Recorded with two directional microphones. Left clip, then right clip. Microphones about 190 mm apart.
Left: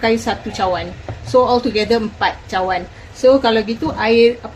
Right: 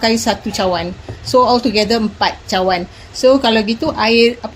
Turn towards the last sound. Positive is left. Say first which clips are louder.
# right 1 dB
turn(degrees=-50)  # may be behind; listen again after turning